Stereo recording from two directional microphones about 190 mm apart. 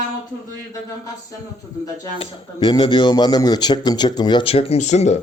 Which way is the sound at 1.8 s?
25° left (ahead or behind).